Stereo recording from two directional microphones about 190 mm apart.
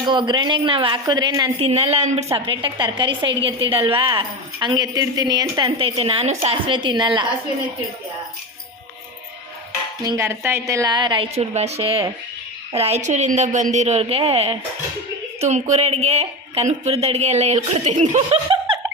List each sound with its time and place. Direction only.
0.0 s speech: 25° right (ahead or behind)
10.2 s speech: 10° right (ahead or behind); by 18.3 s 40° right (ahead or behind)
18.4 s laughter: 25° right (ahead or behind)